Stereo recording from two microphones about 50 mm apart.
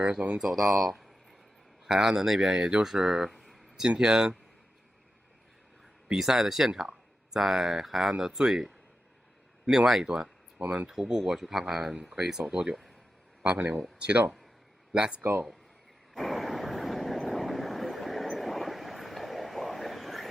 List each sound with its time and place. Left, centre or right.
0.0 s speech: centre
0.4 s speech: centre
3.8 s speech: centre
6.1 s speech: centre
10.6 s speech: right
10.8 s speech: centre
13.6 s speech: right
14.0 s speech: right
15.2 s speech: right
16.1 s vehicle: centre